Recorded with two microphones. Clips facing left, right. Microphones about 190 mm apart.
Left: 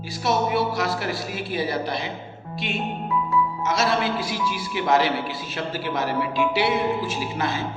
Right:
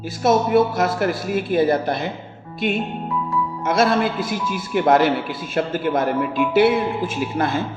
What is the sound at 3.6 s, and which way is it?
A man's voice, 55° right (ahead or behind).